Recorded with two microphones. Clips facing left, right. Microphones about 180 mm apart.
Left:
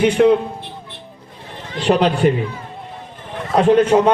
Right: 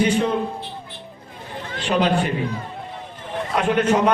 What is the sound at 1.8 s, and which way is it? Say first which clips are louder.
Speech: left 5 dB; 65° left (ahead or behind).